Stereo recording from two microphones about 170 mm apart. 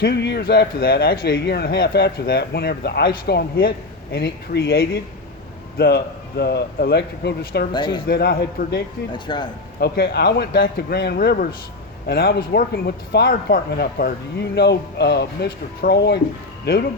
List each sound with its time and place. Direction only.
0.0 s speech: 75° left (ahead or behind)
7.7 s speech: 25° left (ahead or behind)
8.0 s speech: 70° left (ahead or behind)
9.1 s speech: 25° left (ahead or behind)
9.8 s speech: 70° left (ahead or behind)